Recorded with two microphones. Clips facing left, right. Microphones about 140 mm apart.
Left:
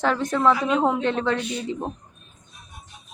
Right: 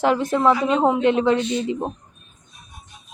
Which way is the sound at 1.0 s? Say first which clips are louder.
Right 6 dB; 15° right (ahead or behind).